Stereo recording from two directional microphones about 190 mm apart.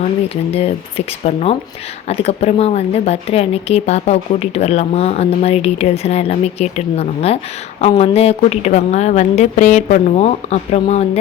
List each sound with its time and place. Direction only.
0.5 s a woman's voice: 30° left (ahead or behind)